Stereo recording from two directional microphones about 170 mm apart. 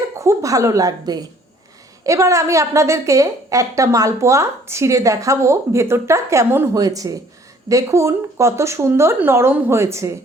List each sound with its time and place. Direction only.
0.2 s a woman's voice: 20° right (ahead or behind)